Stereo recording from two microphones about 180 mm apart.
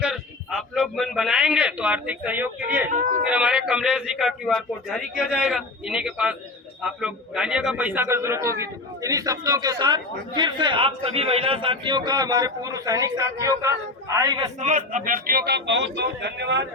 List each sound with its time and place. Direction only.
0.0 s a man's voice: centre (ahead or behind)
2.9 s speech: 45° right (ahead or behind)
3.2 s a man's voice: 5° right (ahead or behind)
14.6 s a man's voice: 45° right (ahead or behind); by 16.6 s 75° right (ahead or behind)